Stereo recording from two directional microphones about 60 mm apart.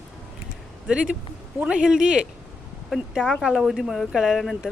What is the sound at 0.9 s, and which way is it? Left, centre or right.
Speech, centre.